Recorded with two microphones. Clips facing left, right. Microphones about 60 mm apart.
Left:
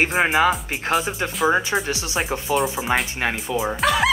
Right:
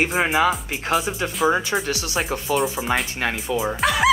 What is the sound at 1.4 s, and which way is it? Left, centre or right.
Speech, centre.